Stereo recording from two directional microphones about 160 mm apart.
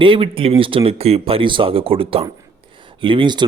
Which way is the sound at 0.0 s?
35° right (ahead or behind).